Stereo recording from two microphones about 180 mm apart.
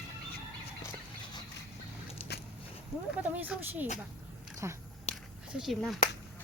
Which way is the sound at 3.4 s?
10° right (ahead or behind).